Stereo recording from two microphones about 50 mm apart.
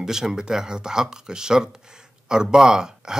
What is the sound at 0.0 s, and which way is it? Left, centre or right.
Speech, centre.